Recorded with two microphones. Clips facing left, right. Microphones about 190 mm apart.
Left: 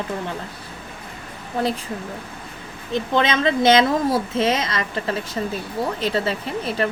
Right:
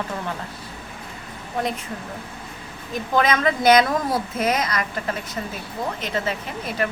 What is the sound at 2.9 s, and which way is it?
A woman's voice, 25° left (ahead or behind).